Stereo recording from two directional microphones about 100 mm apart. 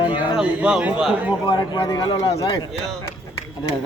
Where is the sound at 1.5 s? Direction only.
50° left (ahead or behind).